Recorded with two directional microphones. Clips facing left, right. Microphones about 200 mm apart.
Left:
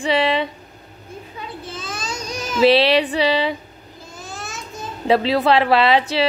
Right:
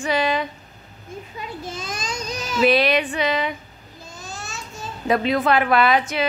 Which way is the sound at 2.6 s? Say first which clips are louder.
Left 4 dB; 30° left (ahead or behind).